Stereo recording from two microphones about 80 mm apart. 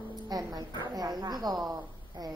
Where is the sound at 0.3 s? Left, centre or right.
Right.